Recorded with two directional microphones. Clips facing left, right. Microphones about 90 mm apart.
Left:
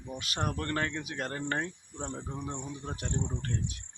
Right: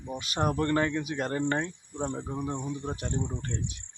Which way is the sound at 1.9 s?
15° right (ahead or behind).